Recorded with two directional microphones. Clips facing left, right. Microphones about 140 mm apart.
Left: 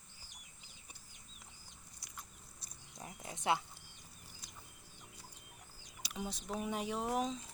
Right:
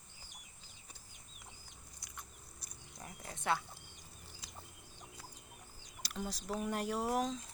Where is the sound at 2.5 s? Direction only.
20° left (ahead or behind).